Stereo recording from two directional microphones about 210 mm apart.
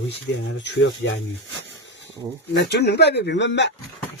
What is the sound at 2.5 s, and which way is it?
Speech, 55° left (ahead or behind).